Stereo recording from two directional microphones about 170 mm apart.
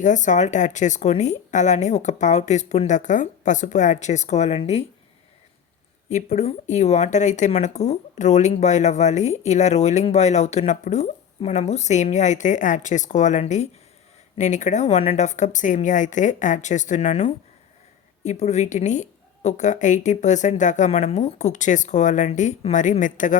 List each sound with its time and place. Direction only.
0.0 s speech: 45° left (ahead or behind)
6.1 s speech: 45° left (ahead or behind)